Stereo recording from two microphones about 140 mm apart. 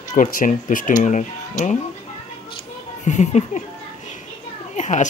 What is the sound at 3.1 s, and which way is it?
Speech, 55° left (ahead or behind).